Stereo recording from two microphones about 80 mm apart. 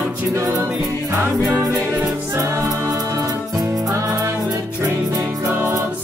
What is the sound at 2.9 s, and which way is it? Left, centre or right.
Music, right.